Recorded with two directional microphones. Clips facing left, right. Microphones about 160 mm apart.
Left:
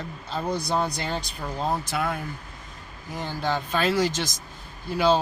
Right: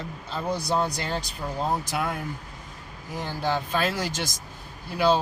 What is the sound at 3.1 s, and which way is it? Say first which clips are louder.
Speech: even; 5° right (ahead or behind).